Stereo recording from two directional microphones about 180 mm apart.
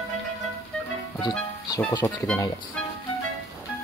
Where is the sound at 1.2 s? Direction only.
20° left (ahead or behind).